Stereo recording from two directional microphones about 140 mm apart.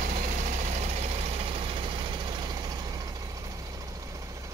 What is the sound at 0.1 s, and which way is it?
Vehicle, 55° right (ahead or behind).